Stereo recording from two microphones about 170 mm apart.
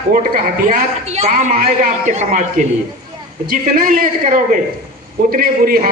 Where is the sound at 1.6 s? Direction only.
60° right (ahead or behind).